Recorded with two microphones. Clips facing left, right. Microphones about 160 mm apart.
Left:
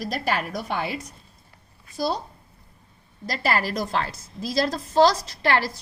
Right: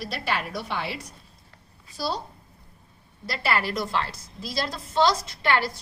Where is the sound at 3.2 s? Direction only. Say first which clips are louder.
Left 2 dB; 40° left (ahead or behind).